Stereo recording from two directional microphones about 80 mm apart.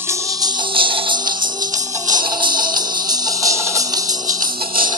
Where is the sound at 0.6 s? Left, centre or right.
Right.